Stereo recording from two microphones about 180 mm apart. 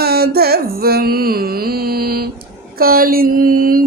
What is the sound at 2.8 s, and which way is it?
Mantra, 55° right (ahead or behind).